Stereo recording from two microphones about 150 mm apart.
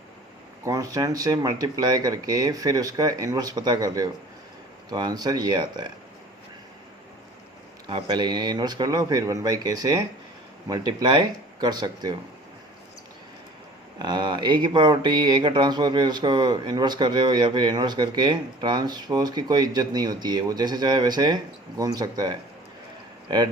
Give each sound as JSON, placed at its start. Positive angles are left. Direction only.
{"t": 0.6, "sound": "speech", "side_deg": -25}
{"t": 7.9, "sound": "speech", "side_deg": -30}
{"t": 14.0, "sound": "speech", "side_deg": -30}